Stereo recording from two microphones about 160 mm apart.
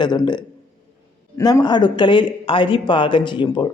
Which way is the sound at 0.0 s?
25° left (ahead or behind).